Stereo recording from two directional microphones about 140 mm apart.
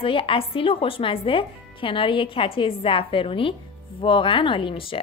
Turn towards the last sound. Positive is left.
turn(degrees=40)  # may be behind; listen again after turning